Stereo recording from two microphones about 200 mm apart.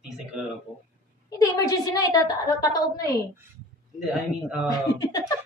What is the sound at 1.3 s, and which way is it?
A woman's voice, 20° left (ahead or behind).